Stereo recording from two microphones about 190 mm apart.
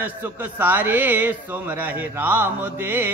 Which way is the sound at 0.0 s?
10° right (ahead or behind).